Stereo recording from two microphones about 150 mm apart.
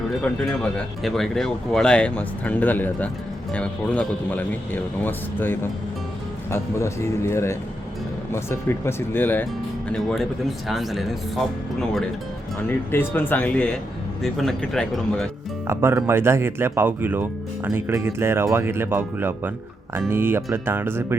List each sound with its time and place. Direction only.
0.2 s speech: 5° left (ahead or behind)
12.6 s speech: 15° left (ahead or behind)
15.6 s speech: 15° right (ahead or behind)